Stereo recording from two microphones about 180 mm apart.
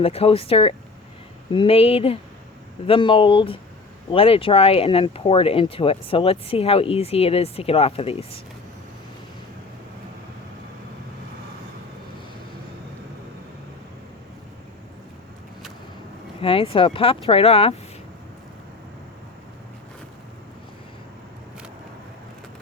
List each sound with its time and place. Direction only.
0.0 s speech: 35° left (ahead or behind)
16.4 s speech: 30° left (ahead or behind)